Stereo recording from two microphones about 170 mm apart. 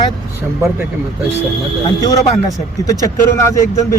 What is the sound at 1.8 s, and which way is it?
Speech, 20° left (ahead or behind).